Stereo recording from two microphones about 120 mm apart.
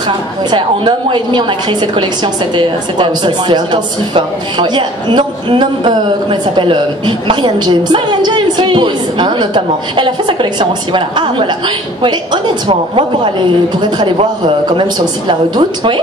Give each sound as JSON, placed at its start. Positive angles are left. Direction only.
{"t": 0.5, "sound": "a woman's voice", "side_deg": -40}